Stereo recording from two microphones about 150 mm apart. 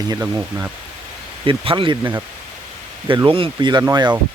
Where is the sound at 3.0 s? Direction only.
35° right (ahead or behind).